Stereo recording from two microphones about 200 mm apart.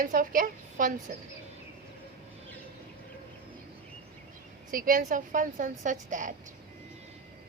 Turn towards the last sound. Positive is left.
turn(degrees=-40)  # may be behind; listen again after turning